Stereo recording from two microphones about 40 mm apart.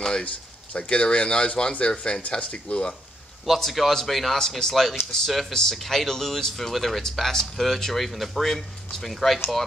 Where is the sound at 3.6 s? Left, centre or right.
Centre.